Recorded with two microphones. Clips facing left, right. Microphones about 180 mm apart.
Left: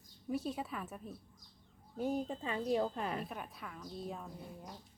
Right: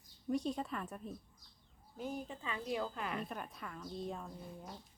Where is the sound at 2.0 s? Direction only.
40° left (ahead or behind).